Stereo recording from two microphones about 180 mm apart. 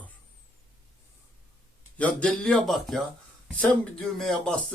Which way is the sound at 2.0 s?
5° left (ahead or behind).